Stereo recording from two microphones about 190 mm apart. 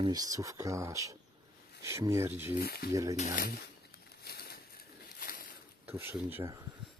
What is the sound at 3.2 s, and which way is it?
Speech, 45° left (ahead or behind).